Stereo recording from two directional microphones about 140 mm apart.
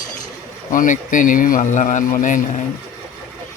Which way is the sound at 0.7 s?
70° left (ahead or behind).